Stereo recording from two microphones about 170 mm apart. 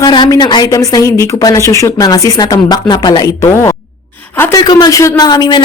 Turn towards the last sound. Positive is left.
turn(degrees=25)  # may be behind; listen again after turning